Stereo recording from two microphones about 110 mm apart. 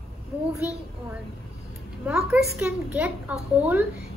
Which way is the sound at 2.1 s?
5° right (ahead or behind).